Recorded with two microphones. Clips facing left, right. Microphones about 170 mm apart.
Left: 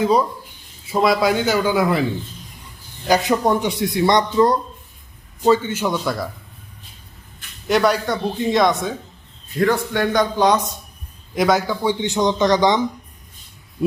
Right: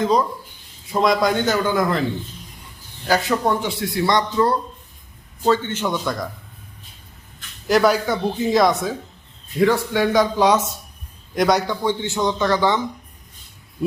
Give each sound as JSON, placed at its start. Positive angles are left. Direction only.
{"t": 0.0, "sound": "speech", "side_deg": 10}
{"t": 3.1, "sound": "speech", "side_deg": 15}
{"t": 7.7, "sound": "speech", "side_deg": 0}